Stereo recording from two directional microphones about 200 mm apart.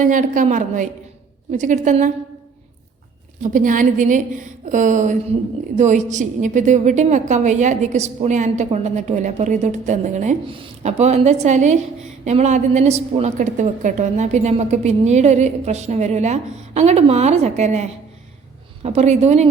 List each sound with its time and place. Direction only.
0.0 s a woman's voice: 40° right (ahead or behind)
3.4 s a woman's voice: 40° right (ahead or behind)